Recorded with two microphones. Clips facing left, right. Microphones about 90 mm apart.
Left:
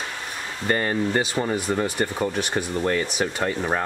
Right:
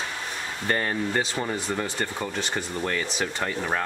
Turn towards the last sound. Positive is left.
turn(degrees=15)  # may be behind; listen again after turning